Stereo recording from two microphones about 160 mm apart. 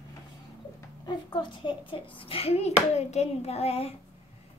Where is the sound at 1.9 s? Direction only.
35° left (ahead or behind).